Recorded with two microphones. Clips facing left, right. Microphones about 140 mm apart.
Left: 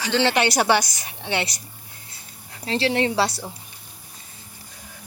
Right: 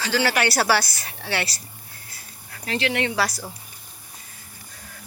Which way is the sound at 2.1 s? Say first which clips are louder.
Even; 20° left (ahead or behind).